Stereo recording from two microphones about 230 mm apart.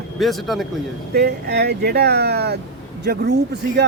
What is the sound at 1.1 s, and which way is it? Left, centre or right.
Speech, right.